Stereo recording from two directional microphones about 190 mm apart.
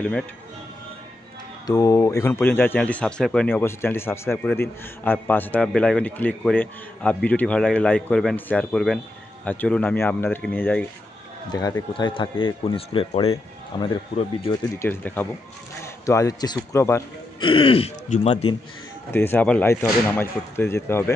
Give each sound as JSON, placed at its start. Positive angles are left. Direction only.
{"t": 1.7, "sound": "a man's voice", "side_deg": 20}
{"t": 14.8, "sound": "speech", "side_deg": 10}
{"t": 17.4, "sound": "speech", "side_deg": 25}
{"t": 19.1, "sound": "speech", "side_deg": 10}